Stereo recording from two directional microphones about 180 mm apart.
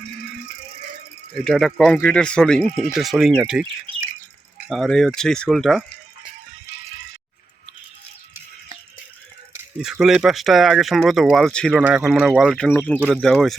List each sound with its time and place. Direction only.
1.4 s speech: centre (ahead or behind)
4.7 s speech: centre (ahead or behind)
9.7 s speech: 5° right (ahead or behind)
13.0 s speech: 10° right (ahead or behind)
13.2 s speech: centre (ahead or behind)